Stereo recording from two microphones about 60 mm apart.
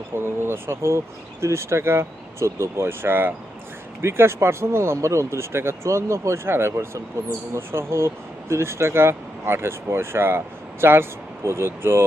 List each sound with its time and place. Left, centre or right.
0.1 s speech: right
4.0 s speech: right